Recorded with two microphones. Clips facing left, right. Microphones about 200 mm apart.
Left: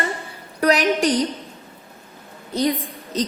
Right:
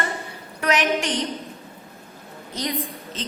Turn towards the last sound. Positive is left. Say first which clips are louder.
# left 5 dB
turn(degrees=30)  # may be behind; listen again after turning